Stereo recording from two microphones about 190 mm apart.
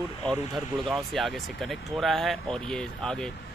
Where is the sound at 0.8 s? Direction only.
Centre (ahead or behind).